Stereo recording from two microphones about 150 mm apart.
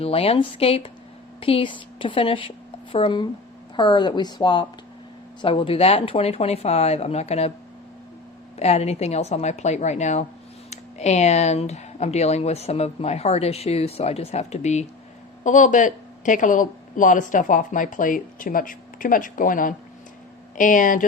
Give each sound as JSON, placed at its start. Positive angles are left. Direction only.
{"t": 0.0, "sound": "a woman's voice", "side_deg": 40}
{"t": 8.5, "sound": "speech", "side_deg": 45}